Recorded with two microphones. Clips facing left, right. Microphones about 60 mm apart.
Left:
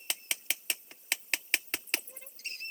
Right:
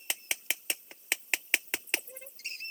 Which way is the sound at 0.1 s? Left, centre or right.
Centre.